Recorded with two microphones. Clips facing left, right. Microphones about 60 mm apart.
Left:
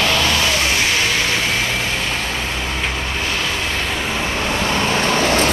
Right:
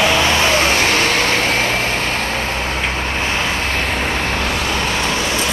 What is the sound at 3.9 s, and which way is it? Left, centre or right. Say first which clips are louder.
Vehicle: right 2 dB; right.